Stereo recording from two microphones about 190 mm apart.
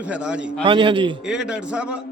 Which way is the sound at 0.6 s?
25° right (ahead or behind).